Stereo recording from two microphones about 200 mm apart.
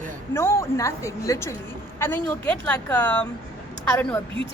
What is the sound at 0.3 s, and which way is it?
A woman's voice, 15° left (ahead or behind).